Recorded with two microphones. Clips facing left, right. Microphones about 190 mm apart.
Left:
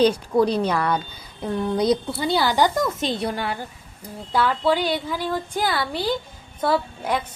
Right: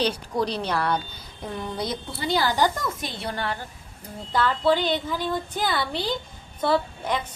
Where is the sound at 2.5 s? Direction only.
15° left (ahead or behind).